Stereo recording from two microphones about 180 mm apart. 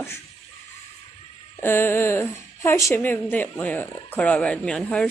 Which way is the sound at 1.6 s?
15° left (ahead or behind).